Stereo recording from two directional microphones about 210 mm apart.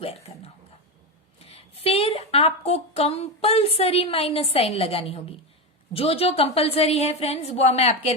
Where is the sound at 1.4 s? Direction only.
30° left (ahead or behind).